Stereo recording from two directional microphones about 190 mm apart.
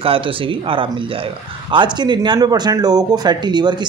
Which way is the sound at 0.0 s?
30° right (ahead or behind).